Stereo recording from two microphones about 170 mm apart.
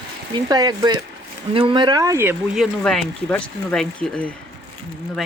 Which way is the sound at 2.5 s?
Centre (ahead or behind).